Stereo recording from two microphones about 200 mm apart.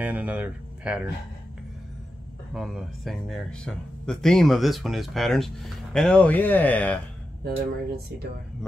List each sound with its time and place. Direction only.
0.0 s speech: 5° right (ahead or behind)
2.5 s speech: centre (ahead or behind)
7.4 s speech: 50° right (ahead or behind)